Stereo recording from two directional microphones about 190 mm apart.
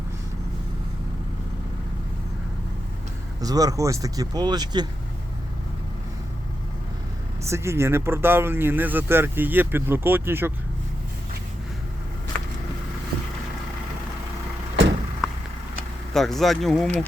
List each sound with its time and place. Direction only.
3.4 s speech: 20° right (ahead or behind)
7.4 s speech: 15° right (ahead or behind)
16.1 s speech: centre (ahead or behind)